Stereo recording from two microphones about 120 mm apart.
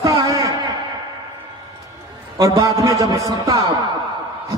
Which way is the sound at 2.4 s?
30° right (ahead or behind).